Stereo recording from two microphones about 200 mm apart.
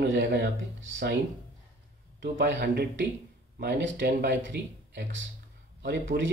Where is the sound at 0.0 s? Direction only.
60° right (ahead or behind).